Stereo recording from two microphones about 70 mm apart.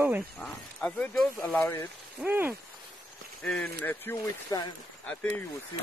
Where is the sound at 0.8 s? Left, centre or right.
Left.